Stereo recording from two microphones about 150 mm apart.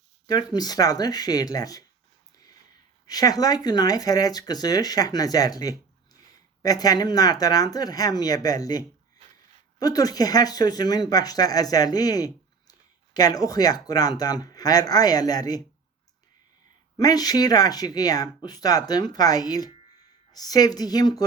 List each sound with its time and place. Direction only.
0.3 s speech: 25° left (ahead or behind)
3.1 s speech: 25° left (ahead or behind)
17.0 s speech: 25° left (ahead or behind)